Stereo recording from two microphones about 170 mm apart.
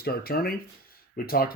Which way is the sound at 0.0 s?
65° left (ahead or behind).